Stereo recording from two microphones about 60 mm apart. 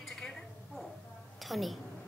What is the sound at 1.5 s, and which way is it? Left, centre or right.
Speech, centre.